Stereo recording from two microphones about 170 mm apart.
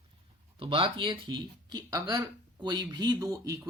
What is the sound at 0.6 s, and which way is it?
Speech, 30° right (ahead or behind).